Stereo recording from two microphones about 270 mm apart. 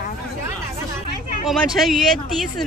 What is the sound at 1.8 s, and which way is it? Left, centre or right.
Speech, centre.